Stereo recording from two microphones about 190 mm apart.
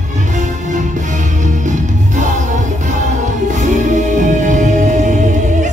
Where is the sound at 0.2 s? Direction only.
40° right (ahead or behind).